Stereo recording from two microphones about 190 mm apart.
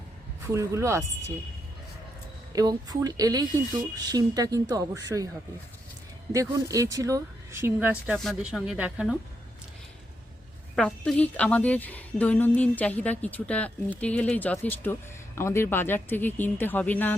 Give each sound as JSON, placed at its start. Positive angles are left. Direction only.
{"t": 0.4, "sound": "speech", "side_deg": -15}
{"t": 2.6, "sound": "speech", "side_deg": -20}
{"t": 6.3, "sound": "speech", "side_deg": -15}
{"t": 10.8, "sound": "a woman's voice", "side_deg": 5}